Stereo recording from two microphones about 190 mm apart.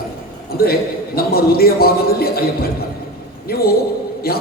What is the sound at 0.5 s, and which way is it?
A man's voice, 55° left (ahead or behind).